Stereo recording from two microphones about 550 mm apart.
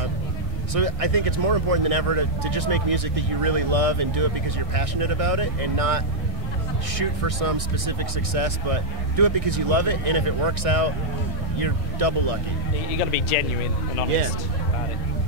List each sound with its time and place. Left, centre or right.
0.7 s speech: right